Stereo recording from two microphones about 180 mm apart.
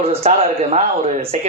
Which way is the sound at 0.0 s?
35° right (ahead or behind).